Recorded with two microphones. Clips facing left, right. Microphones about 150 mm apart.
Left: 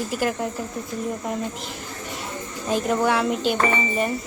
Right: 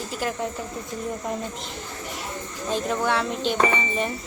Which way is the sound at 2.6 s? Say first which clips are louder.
Left 3 dB; 10° left (ahead or behind).